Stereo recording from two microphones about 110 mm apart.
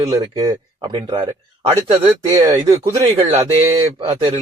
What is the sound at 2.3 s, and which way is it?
Speech, 30° right (ahead or behind).